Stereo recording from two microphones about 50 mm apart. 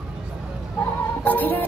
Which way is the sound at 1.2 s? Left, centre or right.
Left.